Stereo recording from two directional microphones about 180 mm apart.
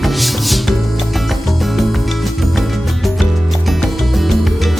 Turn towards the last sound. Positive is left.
turn(degrees=0)  # may be behind; listen again after turning